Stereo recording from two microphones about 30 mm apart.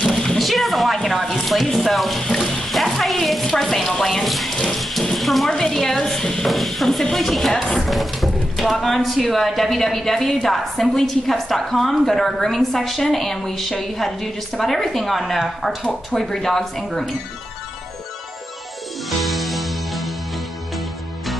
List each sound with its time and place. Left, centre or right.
0.4 s a sound: centre
0.9 s a woman's voice: centre
2.1 s water: centre
2.7 s music: centre
3.3 s a woman's voice: centre
4.6 s a sound: centre
5.0 s speech: centre
5.5 s a woman's voice: left
6.4 s a woman's voice: centre
12.1 s a woman's voice: centre
19.0 s music: centre